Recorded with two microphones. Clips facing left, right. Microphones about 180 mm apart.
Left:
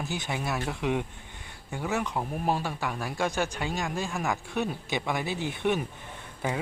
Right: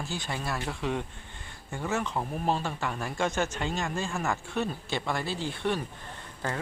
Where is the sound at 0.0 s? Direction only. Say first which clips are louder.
Left 2 dB; 20° left (ahead or behind).